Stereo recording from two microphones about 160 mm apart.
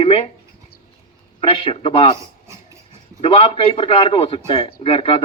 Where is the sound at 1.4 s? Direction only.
35° left (ahead or behind).